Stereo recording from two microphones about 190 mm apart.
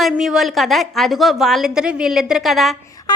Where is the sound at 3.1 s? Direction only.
20° left (ahead or behind).